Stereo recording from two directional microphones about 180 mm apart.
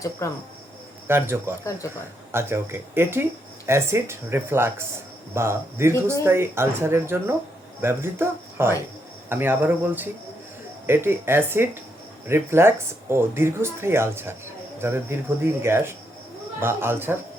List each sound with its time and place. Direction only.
0.2 s speech: 15° left (ahead or behind)
1.0 s speech: 15° right (ahead or behind)